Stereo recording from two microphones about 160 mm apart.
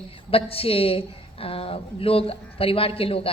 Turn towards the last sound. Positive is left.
turn(degrees=35)  # may be behind; listen again after turning